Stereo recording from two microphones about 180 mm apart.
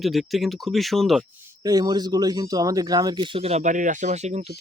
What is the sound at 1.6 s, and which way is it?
Speech, 20° right (ahead or behind).